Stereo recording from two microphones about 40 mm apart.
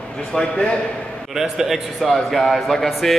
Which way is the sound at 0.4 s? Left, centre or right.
Left.